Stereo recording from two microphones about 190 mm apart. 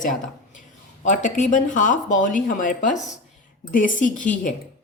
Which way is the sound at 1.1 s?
40° left (ahead or behind).